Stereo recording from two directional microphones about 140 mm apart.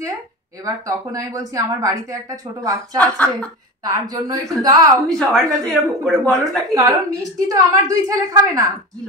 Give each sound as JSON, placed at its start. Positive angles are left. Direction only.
{"t": 0.7, "sound": "a woman's voice", "side_deg": -25}
{"t": 3.0, "sound": "speech", "side_deg": 10}
{"t": 3.8, "sound": "a woman's voice", "side_deg": -25}
{"t": 5.0, "sound": "a woman's voice", "side_deg": 5}
{"t": 6.4, "sound": "a woman's voice", "side_deg": -25}